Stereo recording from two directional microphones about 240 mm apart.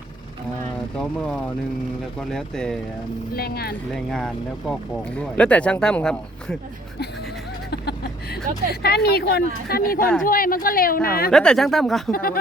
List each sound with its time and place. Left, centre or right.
0.9 s speech: centre
3.3 s speech: left
3.9 s speech: centre
7.7 s a sound: left
8.7 s speech: left
11.3 s speech: centre
12.1 s speech: left